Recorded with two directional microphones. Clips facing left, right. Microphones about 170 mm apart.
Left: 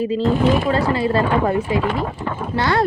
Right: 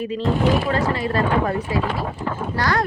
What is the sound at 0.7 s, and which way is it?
Speech, 30° left (ahead or behind).